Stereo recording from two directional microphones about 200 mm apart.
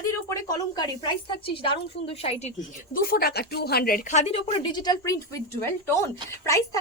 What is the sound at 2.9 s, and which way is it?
A woman's voice, 50° left (ahead or behind).